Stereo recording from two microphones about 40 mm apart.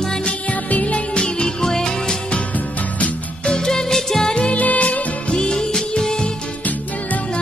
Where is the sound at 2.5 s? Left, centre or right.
Left.